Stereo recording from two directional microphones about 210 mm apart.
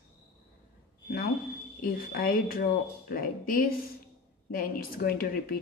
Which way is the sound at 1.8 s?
45° left (ahead or behind).